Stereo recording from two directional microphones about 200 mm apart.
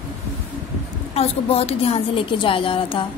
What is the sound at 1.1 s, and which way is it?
A woman's voice, 30° left (ahead or behind).